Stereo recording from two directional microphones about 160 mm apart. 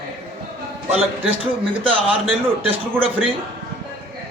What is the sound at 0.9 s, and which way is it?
Speech, 35° right (ahead or behind).